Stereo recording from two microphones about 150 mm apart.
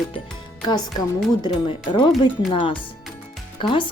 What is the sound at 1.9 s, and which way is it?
Speech, 30° left (ahead or behind).